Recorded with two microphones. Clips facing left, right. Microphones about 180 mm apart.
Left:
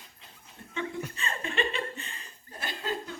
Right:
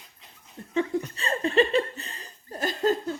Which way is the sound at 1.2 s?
35° right (ahead or behind).